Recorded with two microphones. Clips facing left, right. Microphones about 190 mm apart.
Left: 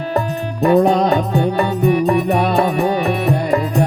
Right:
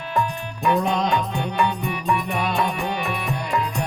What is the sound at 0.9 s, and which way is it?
Music, 45° left (ahead or behind).